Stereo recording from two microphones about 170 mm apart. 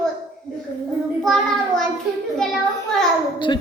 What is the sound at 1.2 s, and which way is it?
Speech, 5° left (ahead or behind).